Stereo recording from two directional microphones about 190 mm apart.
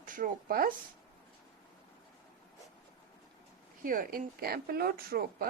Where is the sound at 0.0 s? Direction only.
45° right (ahead or behind).